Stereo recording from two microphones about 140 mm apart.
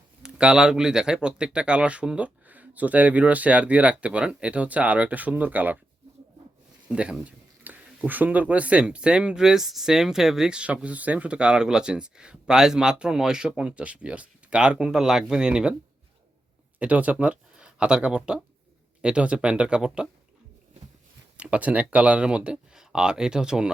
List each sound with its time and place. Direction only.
0.2 s speech: 5° right (ahead or behind)
6.8 s speech: 5° right (ahead or behind)
16.8 s speech: 10° right (ahead or behind)
21.3 s speech: 10° right (ahead or behind)